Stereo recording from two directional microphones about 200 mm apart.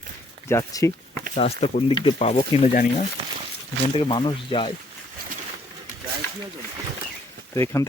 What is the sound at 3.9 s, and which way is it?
Speech, 25° left (ahead or behind).